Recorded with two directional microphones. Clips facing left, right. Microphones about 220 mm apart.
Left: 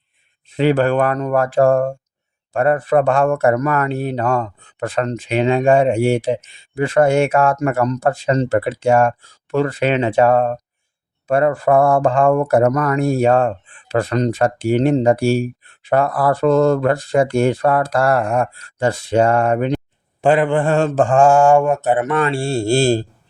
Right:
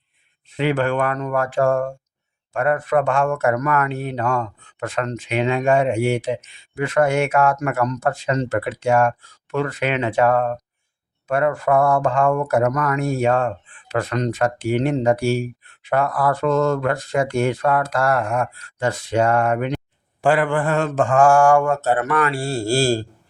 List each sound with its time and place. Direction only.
0.5 s speech: 35° left (ahead or behind)